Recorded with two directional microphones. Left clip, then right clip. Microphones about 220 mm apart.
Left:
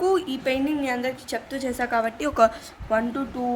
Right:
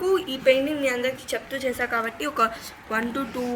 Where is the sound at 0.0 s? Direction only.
55° left (ahead or behind).